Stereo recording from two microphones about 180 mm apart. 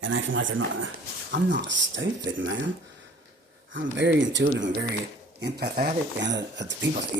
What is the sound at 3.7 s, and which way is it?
Speech, 85° right.